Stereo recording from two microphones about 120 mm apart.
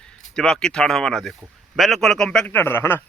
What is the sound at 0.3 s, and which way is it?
Speech, 5° left (ahead or behind).